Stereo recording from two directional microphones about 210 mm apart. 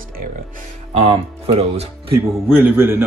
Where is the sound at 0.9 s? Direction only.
30° right (ahead or behind).